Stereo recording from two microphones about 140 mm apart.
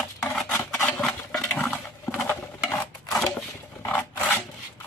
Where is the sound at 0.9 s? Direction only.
10° left (ahead or behind).